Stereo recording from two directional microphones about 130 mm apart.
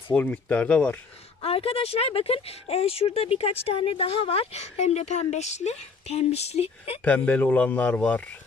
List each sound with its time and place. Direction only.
0.1 s speech: 10° left (ahead or behind)
1.4 s speech: 50° left (ahead or behind)
7.0 s speech: 10° left (ahead or behind)